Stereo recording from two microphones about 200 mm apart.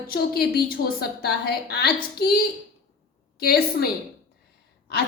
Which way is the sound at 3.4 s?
50° left (ahead or behind).